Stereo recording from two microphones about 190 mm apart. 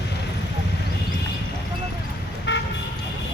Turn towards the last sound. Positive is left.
turn(degrees=65)  # may be behind; listen again after turning